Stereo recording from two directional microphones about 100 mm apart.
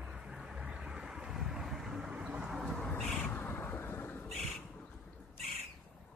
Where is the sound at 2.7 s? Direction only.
15° left (ahead or behind).